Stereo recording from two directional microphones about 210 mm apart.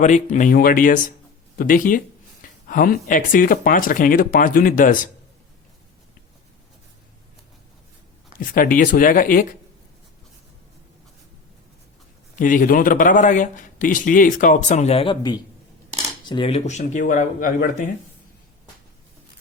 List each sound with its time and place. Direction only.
0.0 s a man's voice: 35° left (ahead or behind)
8.4 s a man's voice: 40° left (ahead or behind)
12.4 s a man's voice: 40° left (ahead or behind)